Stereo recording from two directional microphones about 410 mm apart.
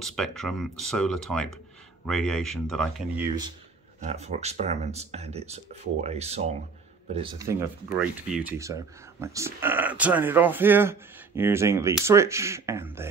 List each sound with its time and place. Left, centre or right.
0.0 s speech: centre